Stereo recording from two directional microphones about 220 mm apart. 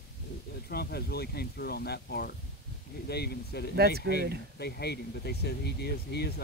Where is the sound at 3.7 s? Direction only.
45° right (ahead or behind).